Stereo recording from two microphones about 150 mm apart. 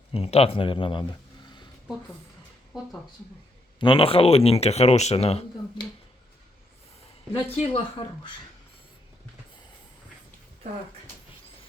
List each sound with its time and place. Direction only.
0.1 s speech: 40° left (ahead or behind)
3.8 s speech: 35° left (ahead or behind)
7.4 s speech: 45° left (ahead or behind)
8.0 s speech: 30° left (ahead or behind)